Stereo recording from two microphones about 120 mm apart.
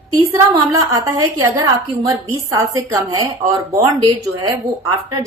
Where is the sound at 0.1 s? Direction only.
25° right (ahead or behind).